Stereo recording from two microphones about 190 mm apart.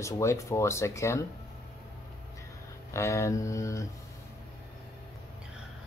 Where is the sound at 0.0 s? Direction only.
15° left (ahead or behind).